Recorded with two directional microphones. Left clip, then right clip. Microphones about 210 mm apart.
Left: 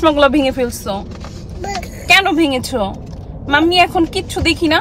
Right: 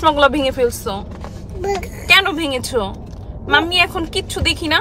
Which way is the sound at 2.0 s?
Centre (ahead or behind).